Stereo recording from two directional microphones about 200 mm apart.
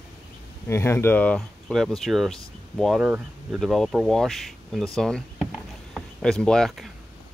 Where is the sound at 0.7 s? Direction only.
10° left (ahead or behind).